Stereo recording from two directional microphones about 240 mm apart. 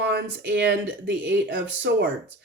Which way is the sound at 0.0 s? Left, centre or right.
Right.